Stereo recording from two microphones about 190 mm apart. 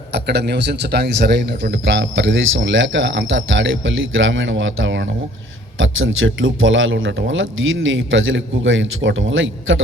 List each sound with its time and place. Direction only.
0.1 s a man's voice: 60° right (ahead or behind)
7.9 s a man's voice: 90° right